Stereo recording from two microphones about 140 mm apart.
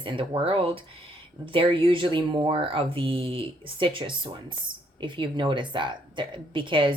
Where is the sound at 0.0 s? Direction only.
35° right (ahead or behind).